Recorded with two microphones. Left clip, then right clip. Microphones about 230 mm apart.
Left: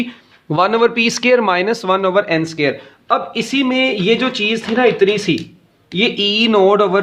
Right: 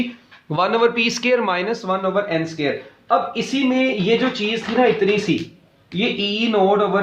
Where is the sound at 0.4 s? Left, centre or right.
Left.